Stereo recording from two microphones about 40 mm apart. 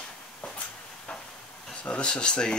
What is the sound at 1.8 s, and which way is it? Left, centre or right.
Speech, left.